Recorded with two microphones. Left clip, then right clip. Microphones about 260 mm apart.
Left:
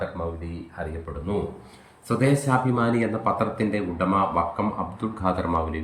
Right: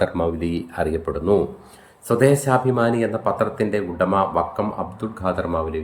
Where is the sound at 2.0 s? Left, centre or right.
Centre.